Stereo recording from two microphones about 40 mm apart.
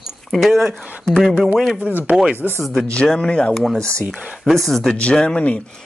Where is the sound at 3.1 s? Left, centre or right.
Left.